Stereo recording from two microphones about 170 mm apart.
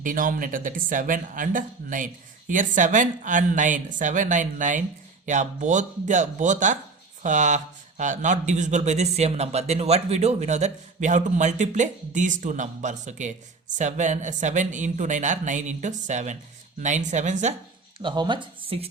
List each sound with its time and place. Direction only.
0.0 s a man's voice: 55° right (ahead or behind)
18.0 s speech: 25° right (ahead or behind)